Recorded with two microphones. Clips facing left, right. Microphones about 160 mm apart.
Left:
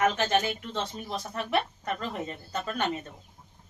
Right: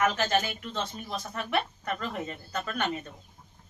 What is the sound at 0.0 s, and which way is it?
A woman's voice, 25° left (ahead or behind).